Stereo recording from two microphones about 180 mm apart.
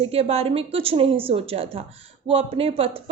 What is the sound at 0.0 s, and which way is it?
A woman's voice, 35° right (ahead or behind).